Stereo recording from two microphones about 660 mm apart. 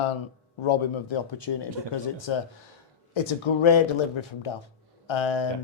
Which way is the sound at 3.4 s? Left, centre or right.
Left.